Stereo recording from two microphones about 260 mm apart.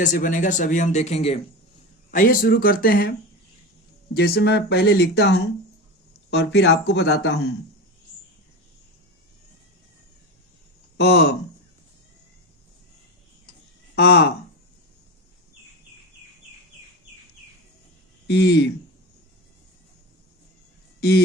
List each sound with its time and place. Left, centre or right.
0.0 s speech: left
4.1 s speech: left
10.9 s speech: left
13.9 s speech: left
18.3 s speech: left